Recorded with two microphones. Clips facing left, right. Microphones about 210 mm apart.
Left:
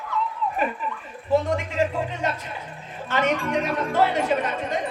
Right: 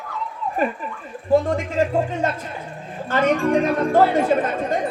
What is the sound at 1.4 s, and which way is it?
Speech, 45° right (ahead or behind).